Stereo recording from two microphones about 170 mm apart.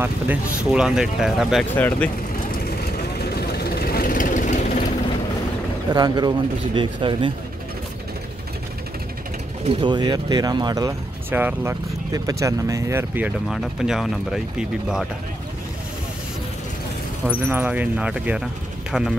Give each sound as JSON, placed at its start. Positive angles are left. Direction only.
{"t": 0.0, "sound": "speech", "side_deg": -5}
{"t": 3.3, "sound": "vehicle", "side_deg": 70}
{"t": 5.9, "sound": "speech", "side_deg": -25}
{"t": 9.7, "sound": "speech", "side_deg": -30}
{"t": 13.5, "sound": "speech", "side_deg": 0}
{"t": 17.3, "sound": "speech", "side_deg": -10}